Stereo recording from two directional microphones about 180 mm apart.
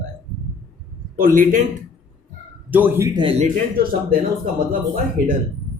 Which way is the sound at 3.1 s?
30° right (ahead or behind).